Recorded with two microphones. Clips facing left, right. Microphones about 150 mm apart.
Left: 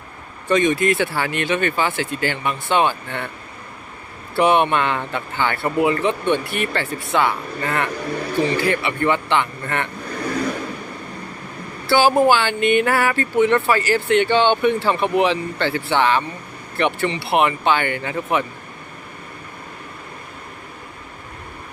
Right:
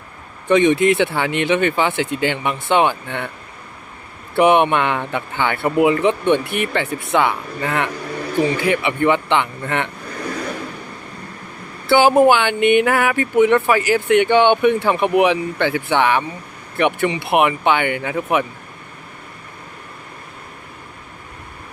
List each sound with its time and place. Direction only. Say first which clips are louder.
0.4 s speech: right 4 dB; 20° right (ahead or behind)
4.4 s speech: right 3 dB; 20° right (ahead or behind)
11.9 s speech: right 3 dB; 20° right (ahead or behind)